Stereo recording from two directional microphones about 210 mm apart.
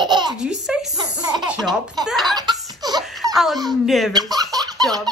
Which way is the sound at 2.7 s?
20° right (ahead or behind).